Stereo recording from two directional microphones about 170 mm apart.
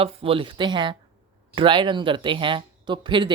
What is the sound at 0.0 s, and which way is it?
Speech, 35° right (ahead or behind).